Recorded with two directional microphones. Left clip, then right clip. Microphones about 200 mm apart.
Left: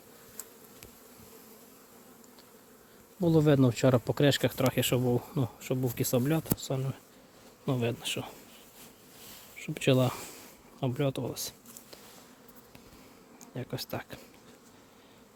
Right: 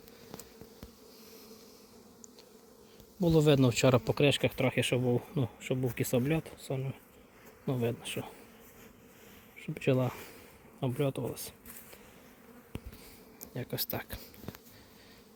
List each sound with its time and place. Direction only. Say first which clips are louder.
3.2 s speech: left 1 dB; 10° left (ahead or behind)
9.6 s speech: left 4 dB; 15° left (ahead or behind)
10.8 s speech: left 1 dB; 5° left (ahead or behind)
13.4 s speech: even; centre (ahead or behind)